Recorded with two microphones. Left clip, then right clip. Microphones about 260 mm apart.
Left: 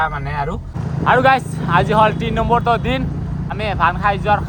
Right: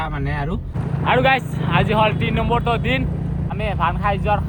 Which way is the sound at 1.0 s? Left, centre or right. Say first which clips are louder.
Left 4 dB; left.